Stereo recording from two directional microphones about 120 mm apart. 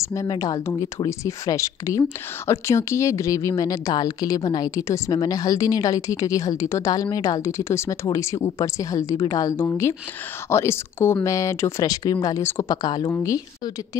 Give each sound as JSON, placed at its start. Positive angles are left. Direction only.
{"t": 0.0, "sound": "speech", "side_deg": 30}
{"t": 12.8, "sound": "speech", "side_deg": 35}